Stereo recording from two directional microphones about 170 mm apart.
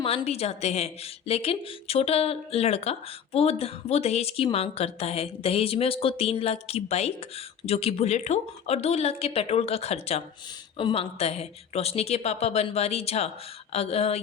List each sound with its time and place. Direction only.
0.0 s a woman's voice: 35° left (ahead or behind)